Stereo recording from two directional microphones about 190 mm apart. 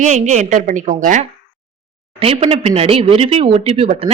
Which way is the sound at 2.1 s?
30° right (ahead or behind).